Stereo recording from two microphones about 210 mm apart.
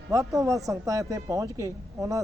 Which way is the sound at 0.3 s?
15° right (ahead or behind).